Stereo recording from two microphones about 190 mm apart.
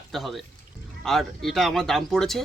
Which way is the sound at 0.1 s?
Centre (ahead or behind).